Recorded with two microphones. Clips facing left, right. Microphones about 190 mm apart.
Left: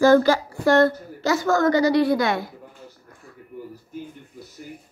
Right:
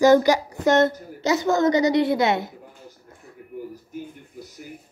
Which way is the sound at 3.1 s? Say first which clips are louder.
Right 2 dB; 10° right (ahead or behind).